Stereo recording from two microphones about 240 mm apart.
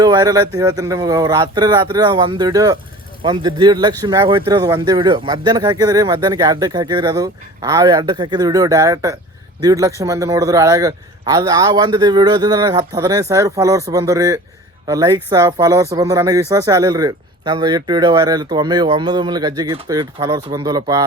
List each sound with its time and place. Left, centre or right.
0.0 s speech: centre